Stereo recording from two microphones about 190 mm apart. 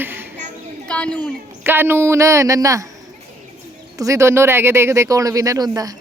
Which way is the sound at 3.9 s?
15° right (ahead or behind).